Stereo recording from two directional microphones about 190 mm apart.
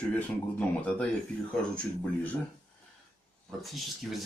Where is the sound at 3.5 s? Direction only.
Centre (ahead or behind).